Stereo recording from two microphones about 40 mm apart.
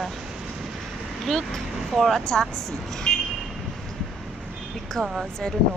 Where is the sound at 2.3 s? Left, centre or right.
Centre.